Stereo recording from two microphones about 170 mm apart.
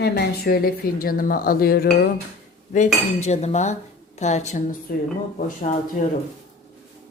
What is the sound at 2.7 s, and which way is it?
Speech, 45° left (ahead or behind).